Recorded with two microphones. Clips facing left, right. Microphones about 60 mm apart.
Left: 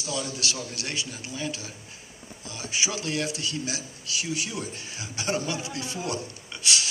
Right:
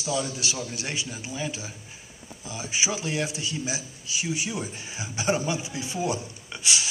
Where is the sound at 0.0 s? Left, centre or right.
Centre.